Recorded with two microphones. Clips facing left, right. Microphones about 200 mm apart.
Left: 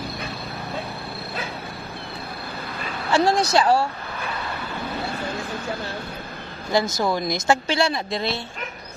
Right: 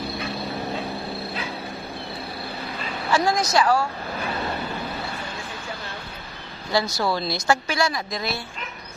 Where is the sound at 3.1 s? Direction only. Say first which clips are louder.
Left 2 dB; 30° left (ahead or behind).